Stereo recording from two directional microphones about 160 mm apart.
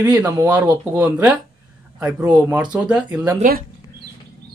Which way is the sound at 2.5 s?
5° right (ahead or behind).